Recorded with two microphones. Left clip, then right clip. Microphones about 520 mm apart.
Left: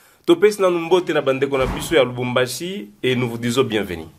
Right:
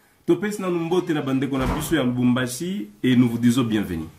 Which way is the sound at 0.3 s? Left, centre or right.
Left.